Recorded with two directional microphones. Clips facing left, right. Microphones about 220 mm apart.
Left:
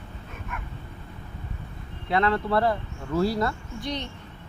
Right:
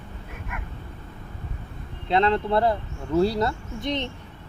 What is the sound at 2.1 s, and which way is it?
A woman's voice, 25° right (ahead or behind).